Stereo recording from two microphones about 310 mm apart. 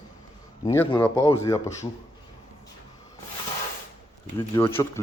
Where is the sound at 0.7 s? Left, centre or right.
Centre.